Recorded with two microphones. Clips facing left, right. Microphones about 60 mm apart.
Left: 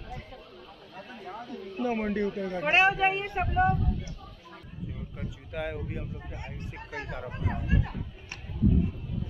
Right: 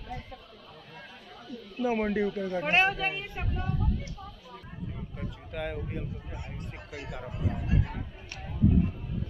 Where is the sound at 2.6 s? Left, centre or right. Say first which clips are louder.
Left 3 dB; centre.